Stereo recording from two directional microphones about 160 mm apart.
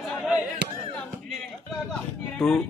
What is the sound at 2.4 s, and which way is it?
Speech, centre (ahead or behind).